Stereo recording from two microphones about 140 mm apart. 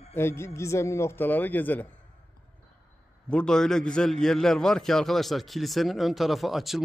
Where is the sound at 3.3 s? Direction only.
5° left (ahead or behind).